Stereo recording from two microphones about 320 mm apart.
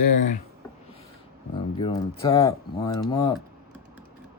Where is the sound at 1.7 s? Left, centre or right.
Centre.